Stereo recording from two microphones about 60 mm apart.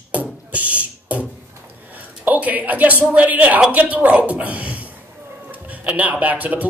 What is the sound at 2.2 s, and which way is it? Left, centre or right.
Speech, right.